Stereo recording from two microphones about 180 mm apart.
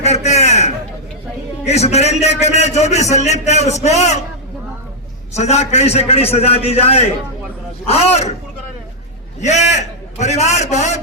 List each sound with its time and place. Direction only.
0.0 s a sound: 40° left (ahead or behind)
1.6 s a man's voice: 35° left (ahead or behind)
5.3 s a man's voice: 40° left (ahead or behind)
9.4 s a man's voice: 40° left (ahead or behind)